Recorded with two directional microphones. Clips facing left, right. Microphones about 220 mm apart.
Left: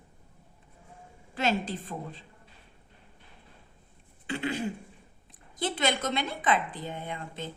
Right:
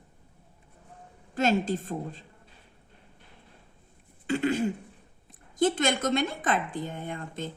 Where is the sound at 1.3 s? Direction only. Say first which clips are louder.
Right 4 dB; 45° right (ahead or behind).